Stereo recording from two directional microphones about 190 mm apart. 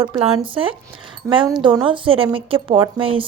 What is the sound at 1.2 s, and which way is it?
A woman's voice, 15° right (ahead or behind).